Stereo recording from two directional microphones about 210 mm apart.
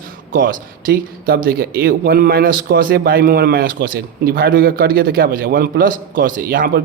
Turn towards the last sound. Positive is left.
turn(degrees=-45)  # may be behind; listen again after turning